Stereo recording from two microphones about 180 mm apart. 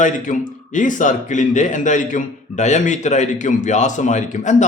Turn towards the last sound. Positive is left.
turn(degrees=40)  # may be behind; listen again after turning